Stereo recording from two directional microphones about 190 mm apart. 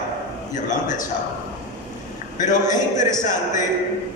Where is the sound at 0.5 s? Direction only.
40° left (ahead or behind).